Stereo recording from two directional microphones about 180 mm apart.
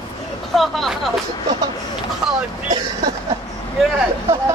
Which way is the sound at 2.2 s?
5° right (ahead or behind).